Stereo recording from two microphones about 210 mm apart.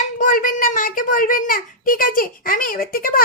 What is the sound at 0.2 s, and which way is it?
A child's voice, 40° left (ahead or behind).